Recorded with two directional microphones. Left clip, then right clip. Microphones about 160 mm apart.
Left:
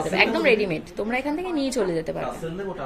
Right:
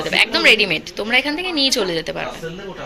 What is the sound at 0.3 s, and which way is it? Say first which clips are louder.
A woman's voice: right 7 dB; 10° left (ahead or behind).